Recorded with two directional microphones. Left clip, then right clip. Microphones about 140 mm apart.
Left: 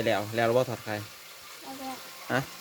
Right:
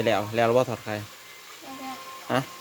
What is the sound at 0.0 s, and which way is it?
Speech, 35° right (ahead or behind).